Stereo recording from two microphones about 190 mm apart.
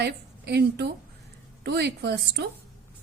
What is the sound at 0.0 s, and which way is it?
A woman's voice, 60° right (ahead or behind).